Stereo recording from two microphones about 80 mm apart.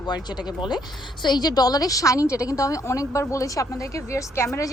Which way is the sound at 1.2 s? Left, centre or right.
Left.